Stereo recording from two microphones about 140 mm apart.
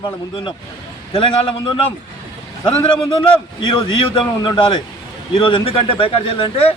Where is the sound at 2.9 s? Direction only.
35° left (ahead or behind).